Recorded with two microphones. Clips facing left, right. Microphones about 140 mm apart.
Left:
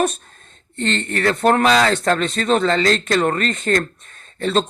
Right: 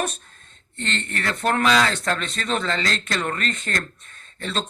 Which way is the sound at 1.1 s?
45° left (ahead or behind).